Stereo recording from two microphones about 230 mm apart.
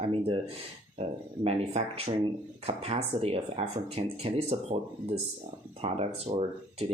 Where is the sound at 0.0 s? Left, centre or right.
Right.